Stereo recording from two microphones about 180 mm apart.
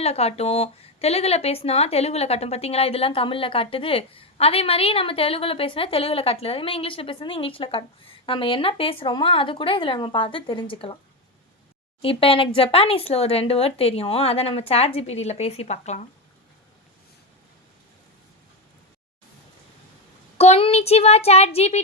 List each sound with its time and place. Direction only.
0.0 s speech: 35° left (ahead or behind)
12.0 s speech: 30° left (ahead or behind)
20.4 s speech: 35° left (ahead or behind)